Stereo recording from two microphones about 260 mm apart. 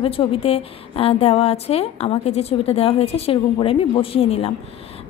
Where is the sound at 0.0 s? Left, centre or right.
Left.